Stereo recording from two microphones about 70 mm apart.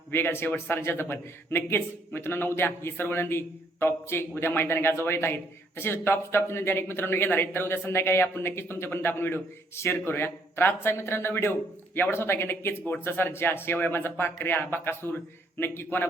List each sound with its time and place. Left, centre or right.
0.1 s a man's voice: left